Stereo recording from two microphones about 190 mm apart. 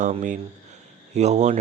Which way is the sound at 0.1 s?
40° right (ahead or behind).